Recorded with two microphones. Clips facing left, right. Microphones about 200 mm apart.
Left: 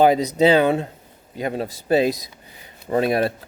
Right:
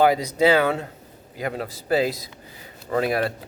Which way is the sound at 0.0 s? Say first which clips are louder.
Left 3 dB; 20° left (ahead or behind).